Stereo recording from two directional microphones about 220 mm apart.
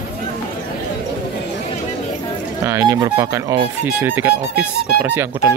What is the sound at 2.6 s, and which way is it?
Speech, 15° right (ahead or behind).